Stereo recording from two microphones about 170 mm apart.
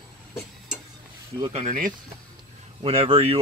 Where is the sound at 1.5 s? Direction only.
40° right (ahead or behind).